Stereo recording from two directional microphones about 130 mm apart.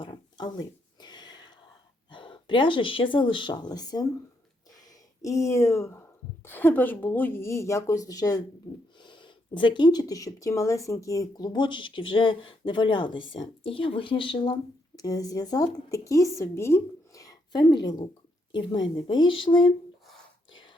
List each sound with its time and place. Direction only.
0.0 s a sound: 35° left (ahead or behind)
2.0 s speech: 40° left (ahead or behind)
5.2 s a woman's voice: 25° left (ahead or behind); by 19.7 s 40° left (ahead or behind)